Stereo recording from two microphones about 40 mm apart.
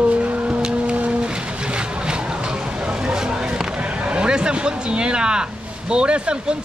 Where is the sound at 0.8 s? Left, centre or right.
Right.